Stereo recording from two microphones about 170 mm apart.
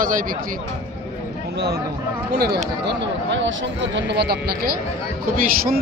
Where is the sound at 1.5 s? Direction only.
70° right (ahead or behind).